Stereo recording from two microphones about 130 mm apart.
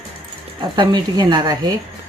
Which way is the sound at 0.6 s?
35° right (ahead or behind).